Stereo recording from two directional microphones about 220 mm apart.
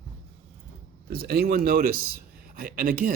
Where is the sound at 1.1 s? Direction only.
45° right (ahead or behind).